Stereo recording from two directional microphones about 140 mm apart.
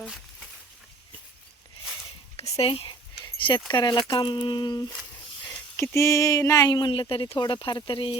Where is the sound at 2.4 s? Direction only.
45° left (ahead or behind).